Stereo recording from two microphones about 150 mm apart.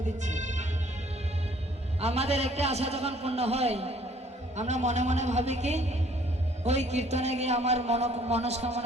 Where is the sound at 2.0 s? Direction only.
45° right (ahead or behind).